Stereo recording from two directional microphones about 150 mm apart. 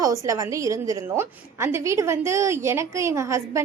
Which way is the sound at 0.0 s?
20° right (ahead or behind).